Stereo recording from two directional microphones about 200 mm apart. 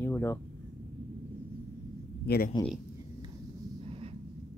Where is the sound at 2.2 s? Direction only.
50° left (ahead or behind).